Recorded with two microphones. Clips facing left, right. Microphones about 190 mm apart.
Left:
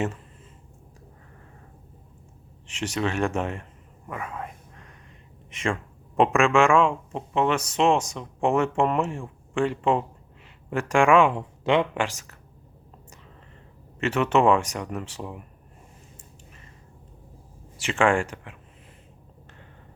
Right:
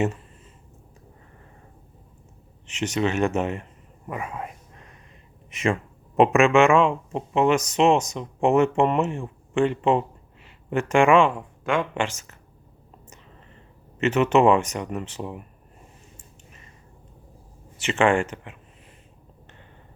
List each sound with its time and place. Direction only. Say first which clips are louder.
2.9 s speech: right 3 dB; 5° right (ahead or behind)
4.0 s speech: right 2 dB; 15° right (ahead or behind)
11.3 s speech: left 3 dB; 20° left (ahead or behind)
11.9 s speech: right 1 dB; centre (ahead or behind)
14.0 s speech: right 3 dB; 5° right (ahead or behind)
17.8 s speech: right 2 dB; 5° right (ahead or behind)